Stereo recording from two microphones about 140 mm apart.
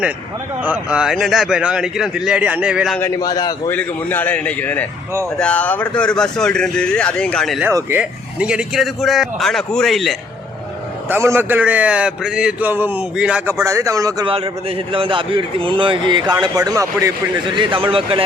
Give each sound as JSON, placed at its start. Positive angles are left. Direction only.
{"t": 0.6, "sound": "a man's voice", "side_deg": -10}
{"t": 3.2, "sound": "a man's voice", "side_deg": 25}
{"t": 3.7, "sound": "speech", "side_deg": 15}
{"t": 7.7, "sound": "a man's voice", "side_deg": -20}
{"t": 11.1, "sound": "a man's voice", "side_deg": -15}
{"t": 13.7, "sound": "speech", "side_deg": -20}
{"t": 14.3, "sound": "a man's voice", "side_deg": -45}
{"t": 17.5, "sound": "speech", "side_deg": -35}